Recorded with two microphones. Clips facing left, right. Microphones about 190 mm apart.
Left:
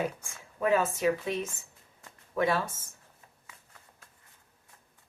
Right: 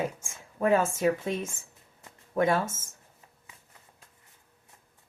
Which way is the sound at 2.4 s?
45° right (ahead or behind).